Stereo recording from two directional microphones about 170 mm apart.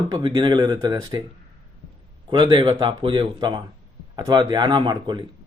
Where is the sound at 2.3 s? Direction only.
25° right (ahead or behind).